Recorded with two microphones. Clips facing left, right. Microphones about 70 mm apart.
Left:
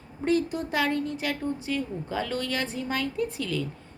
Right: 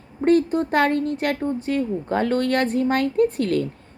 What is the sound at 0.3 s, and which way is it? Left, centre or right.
Speech, right.